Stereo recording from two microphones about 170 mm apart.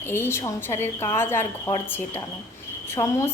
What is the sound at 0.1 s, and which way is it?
A woman's voice, 15° left (ahead or behind).